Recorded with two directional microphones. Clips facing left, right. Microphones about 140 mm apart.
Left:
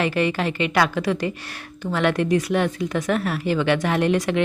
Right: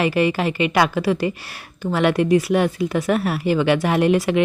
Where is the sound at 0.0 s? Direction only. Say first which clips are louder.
Right 3 dB; 10° right (ahead or behind).